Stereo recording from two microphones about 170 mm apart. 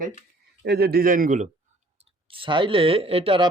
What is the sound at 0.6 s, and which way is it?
Speech, 65° right (ahead or behind).